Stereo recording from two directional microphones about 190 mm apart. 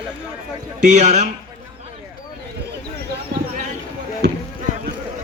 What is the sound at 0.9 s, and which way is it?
Speech, 35° right (ahead or behind).